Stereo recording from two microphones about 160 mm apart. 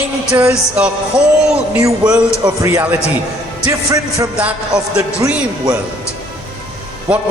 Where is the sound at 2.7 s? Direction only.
10° right (ahead or behind).